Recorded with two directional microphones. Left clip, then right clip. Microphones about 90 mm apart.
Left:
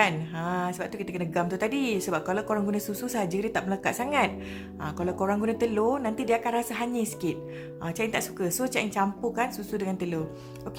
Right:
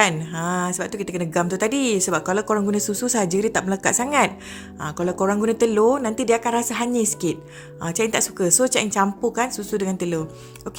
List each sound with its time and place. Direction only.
0.0 s a woman's voice: 45° right (ahead or behind)